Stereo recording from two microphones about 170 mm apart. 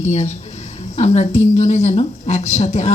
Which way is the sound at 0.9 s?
40° left (ahead or behind).